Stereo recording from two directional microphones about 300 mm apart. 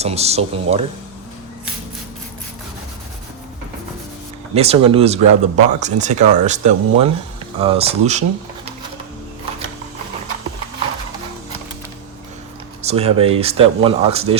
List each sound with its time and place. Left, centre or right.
0.0 s speech: right
4.5 s speech: centre
12.8 s speech: right